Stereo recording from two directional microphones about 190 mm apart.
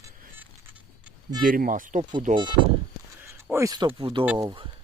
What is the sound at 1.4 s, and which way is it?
Speech, 50° right (ahead or behind).